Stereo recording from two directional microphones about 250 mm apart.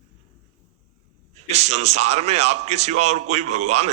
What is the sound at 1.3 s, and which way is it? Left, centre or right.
A man's voice, right.